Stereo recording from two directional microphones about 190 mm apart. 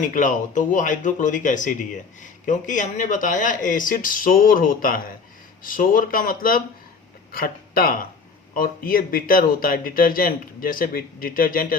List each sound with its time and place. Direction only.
0.0 s speech: 45° left (ahead or behind)